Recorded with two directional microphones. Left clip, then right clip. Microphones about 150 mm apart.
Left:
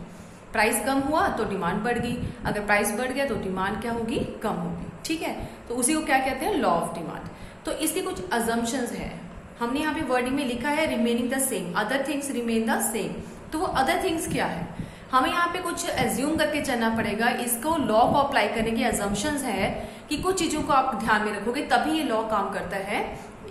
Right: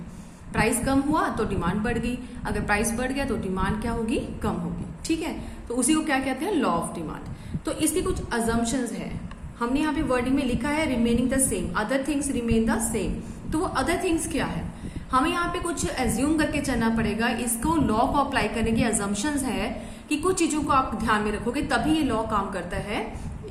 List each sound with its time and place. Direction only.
0.5 s a woman's voice: 35° right (ahead or behind)